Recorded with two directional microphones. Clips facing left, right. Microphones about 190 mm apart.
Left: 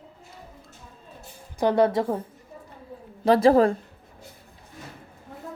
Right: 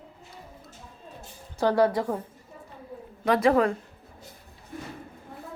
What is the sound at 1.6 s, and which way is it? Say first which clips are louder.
Speech: left 2 dB; 20° left (ahead or behind).